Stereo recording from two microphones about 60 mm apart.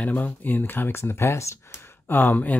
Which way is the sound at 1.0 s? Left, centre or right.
Left.